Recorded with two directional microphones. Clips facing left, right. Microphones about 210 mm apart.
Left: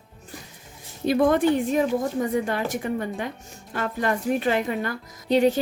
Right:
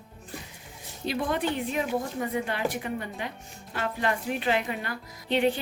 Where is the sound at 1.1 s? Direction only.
50° left (ahead or behind).